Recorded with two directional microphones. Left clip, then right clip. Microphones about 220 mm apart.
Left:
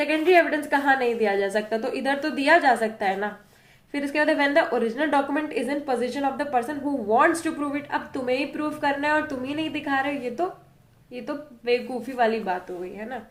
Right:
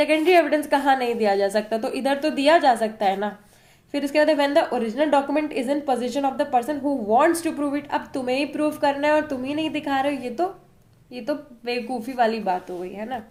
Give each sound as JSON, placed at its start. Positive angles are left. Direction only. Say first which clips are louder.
{"t": 0.0, "sound": "a woman's voice", "louder": "right 2 dB", "side_deg": -40}